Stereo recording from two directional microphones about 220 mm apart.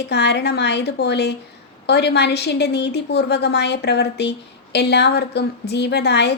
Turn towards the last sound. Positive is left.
turn(degrees=50)  # may be behind; listen again after turning